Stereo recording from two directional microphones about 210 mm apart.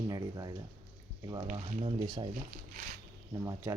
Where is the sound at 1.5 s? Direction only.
25° right (ahead or behind).